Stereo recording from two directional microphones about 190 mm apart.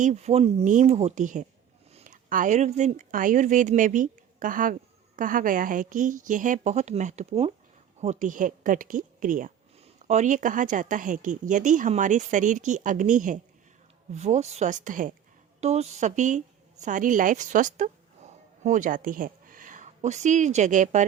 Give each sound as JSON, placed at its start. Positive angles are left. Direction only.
{"t": 0.0, "sound": "a woman's voice", "side_deg": -35}